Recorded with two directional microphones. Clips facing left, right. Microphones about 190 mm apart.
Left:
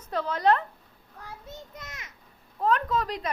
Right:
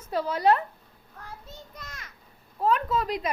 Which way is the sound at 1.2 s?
20° left (ahead or behind).